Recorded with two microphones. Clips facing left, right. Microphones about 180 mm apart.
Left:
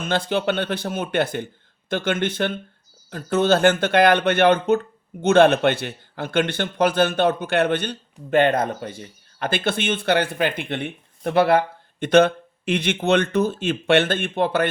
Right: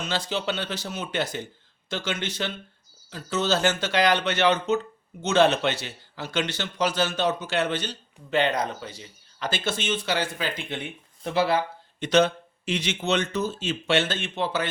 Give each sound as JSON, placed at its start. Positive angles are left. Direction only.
{"t": 0.0, "sound": "a man's voice", "side_deg": 55}